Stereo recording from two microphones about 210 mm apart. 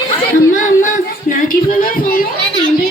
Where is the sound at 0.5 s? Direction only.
40° left (ahead or behind).